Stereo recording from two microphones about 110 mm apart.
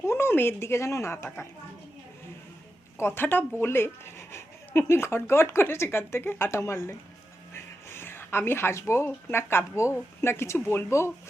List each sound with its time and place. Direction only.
0.0 s speech: 25° left (ahead or behind)
3.0 s speech: 20° left (ahead or behind)